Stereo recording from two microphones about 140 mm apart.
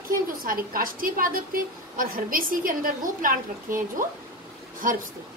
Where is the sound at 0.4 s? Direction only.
90° right.